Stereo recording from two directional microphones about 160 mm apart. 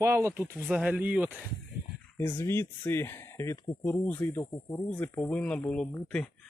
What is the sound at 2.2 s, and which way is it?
Speech, 15° left (ahead or behind).